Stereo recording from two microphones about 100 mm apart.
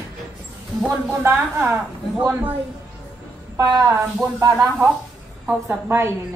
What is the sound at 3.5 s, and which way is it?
Speech, 30° right (ahead or behind).